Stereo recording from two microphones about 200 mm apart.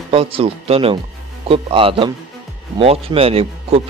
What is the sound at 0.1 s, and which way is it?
A man's voice, 30° right (ahead or behind).